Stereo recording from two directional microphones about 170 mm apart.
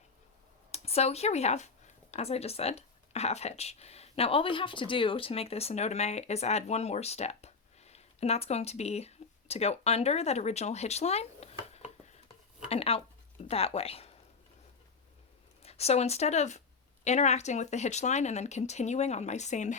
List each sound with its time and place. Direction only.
0.7 s speech: 35° left (ahead or behind)
12.6 s a sound: 35° left (ahead or behind)
13.5 s a woman's voice: 35° left (ahead or behind)
15.6 s a woman's voice: 40° left (ahead or behind)